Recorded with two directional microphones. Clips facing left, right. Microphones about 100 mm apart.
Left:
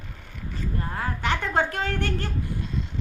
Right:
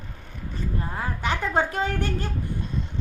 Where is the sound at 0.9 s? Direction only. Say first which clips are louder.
Left 2 dB; 15° right (ahead or behind).